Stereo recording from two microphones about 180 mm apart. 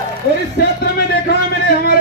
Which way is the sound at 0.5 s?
55° left (ahead or behind).